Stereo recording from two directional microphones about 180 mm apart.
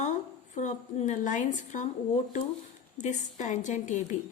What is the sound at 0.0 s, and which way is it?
A woman's voice, 40° left (ahead or behind).